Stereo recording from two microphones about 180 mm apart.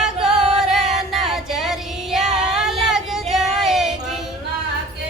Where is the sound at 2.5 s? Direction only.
5° right (ahead or behind).